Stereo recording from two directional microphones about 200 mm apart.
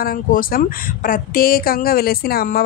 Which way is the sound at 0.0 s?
45° left (ahead or behind).